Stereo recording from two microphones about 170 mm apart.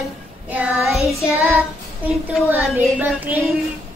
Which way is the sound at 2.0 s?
10° right (ahead or behind).